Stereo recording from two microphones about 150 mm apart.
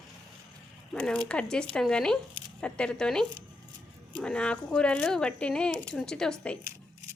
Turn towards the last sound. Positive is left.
turn(degrees=5)  # may be behind; listen again after turning